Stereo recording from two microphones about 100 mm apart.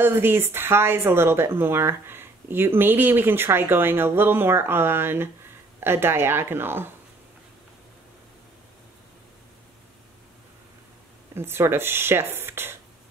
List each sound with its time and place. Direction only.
0.0 s speech: 25° right (ahead or behind)
11.3 s speech: 25° right (ahead or behind)